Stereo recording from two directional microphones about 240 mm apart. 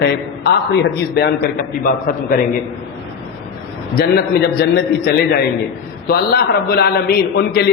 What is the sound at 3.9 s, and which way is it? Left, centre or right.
A man's voice, left.